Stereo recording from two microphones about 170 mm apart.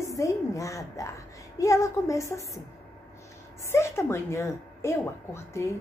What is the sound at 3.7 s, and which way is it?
A woman's voice, 15° left (ahead or behind).